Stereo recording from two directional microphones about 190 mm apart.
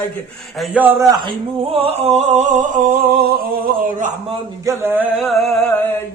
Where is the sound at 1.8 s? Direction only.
30° right (ahead or behind).